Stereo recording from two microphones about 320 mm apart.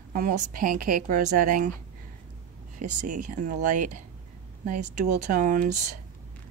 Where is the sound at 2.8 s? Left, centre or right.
Right.